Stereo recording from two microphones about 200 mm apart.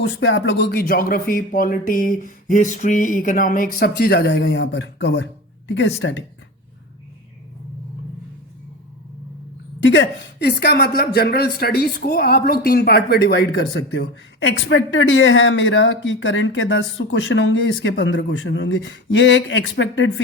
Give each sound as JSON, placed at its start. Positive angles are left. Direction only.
{"t": 0.0, "sound": "speech", "side_deg": 70}
{"t": 9.8, "sound": "speech", "side_deg": 65}